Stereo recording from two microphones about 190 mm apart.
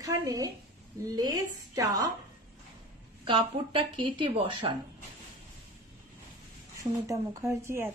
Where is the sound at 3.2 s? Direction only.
25° right (ahead or behind).